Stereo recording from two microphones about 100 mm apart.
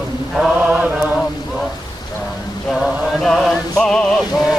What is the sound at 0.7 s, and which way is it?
Mantra, 10° right (ahead or behind).